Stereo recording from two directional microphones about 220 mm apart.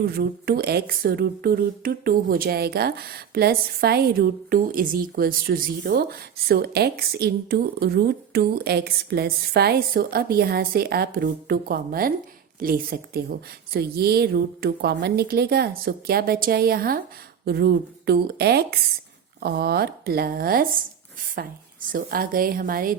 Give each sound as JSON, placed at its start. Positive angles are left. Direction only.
{"t": 0.0, "sound": "a woman's voice", "side_deg": -45}